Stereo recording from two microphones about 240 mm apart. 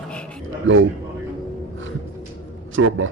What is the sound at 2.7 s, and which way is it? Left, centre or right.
Speech, right.